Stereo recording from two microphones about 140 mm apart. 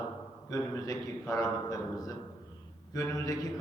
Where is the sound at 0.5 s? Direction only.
25° left (ahead or behind).